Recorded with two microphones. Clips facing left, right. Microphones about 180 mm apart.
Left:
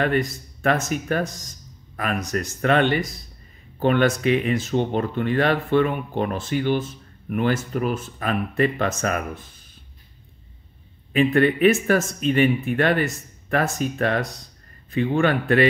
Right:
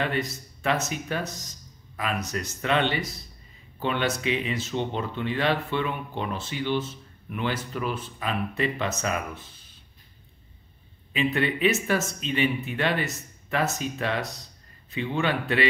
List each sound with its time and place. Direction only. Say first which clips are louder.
0.0 s speech: left 6 dB; 50° left (ahead or behind)
11.1 s speech: left 8 dB; 50° left (ahead or behind)